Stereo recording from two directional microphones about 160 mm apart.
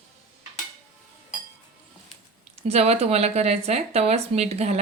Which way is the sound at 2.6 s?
40° right (ahead or behind).